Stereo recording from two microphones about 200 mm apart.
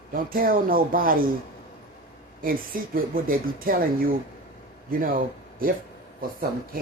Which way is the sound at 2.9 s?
45° right (ahead or behind).